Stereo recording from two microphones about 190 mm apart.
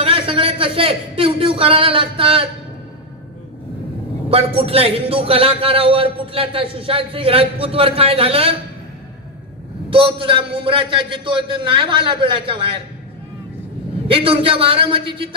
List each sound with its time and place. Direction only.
0.0 s a man's voice: 30° right (ahead or behind)
4.3 s a man's voice: 30° right (ahead or behind)
9.8 s a man's voice: 25° right (ahead or behind)
14.0 s a man's voice: 30° right (ahead or behind)